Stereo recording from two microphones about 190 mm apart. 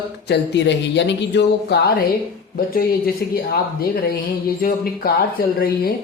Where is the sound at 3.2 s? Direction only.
55° left (ahead or behind).